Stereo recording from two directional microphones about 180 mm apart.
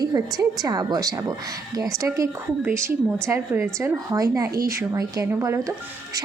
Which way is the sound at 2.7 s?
15° right (ahead or behind).